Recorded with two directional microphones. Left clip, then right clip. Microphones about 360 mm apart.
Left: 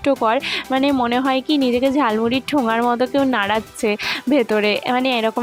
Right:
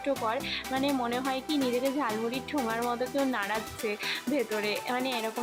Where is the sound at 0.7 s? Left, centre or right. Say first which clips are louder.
Left 12 dB; left.